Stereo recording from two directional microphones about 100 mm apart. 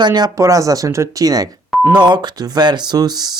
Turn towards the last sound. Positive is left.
turn(degrees=-40)  # may be behind; listen again after turning